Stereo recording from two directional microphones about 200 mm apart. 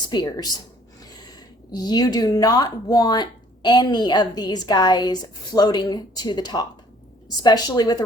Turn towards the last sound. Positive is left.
turn(degrees=20)  # may be behind; listen again after turning